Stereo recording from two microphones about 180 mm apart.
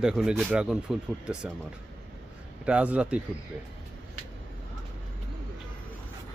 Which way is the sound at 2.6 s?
5° right (ahead or behind).